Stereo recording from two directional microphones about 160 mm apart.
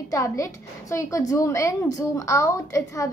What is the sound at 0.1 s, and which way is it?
A woman's voice, 20° left (ahead or behind).